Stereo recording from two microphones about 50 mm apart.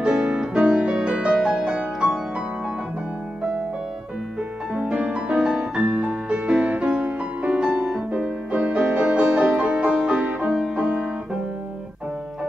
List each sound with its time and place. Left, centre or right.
0.6 s music: right
4.7 s music: right